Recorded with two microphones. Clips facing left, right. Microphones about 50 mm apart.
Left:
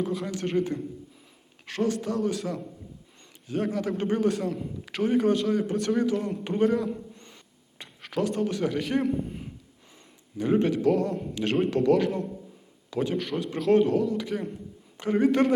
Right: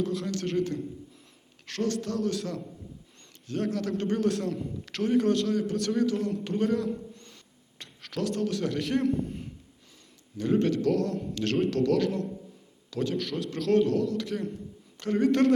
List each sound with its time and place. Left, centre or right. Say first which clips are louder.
0.0 s a man's voice: left 1 dB; centre
6.7 s a sound: left 2 dB; centre
7.8 s a man's voice: left 4 dB; centre